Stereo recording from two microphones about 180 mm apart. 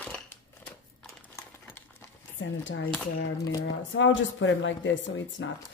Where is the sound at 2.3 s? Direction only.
90° left.